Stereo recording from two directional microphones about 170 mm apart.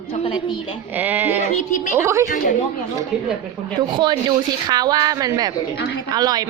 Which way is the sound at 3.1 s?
5° right (ahead or behind).